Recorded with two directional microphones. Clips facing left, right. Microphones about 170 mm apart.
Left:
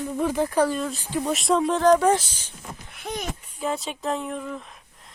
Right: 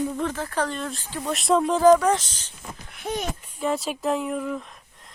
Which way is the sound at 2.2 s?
10° left (ahead or behind).